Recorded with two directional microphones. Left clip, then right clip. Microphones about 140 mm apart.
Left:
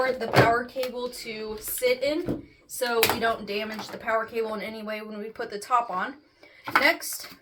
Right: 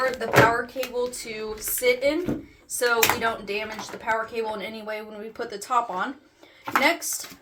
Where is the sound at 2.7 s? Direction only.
20° right (ahead or behind).